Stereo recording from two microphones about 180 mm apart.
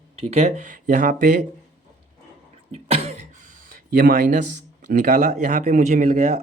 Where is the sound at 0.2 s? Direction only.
35° right (ahead or behind).